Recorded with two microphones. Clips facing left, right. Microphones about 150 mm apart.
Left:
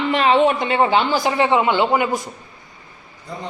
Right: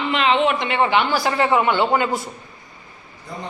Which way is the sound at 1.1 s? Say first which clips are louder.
Left 1 dB; 20° left (ahead or behind).